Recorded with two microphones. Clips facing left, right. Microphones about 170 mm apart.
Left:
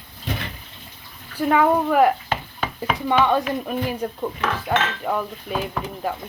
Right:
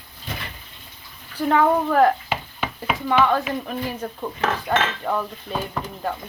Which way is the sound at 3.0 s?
20° left (ahead or behind).